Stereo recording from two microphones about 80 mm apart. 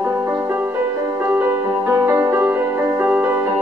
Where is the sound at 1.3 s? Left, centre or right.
Right.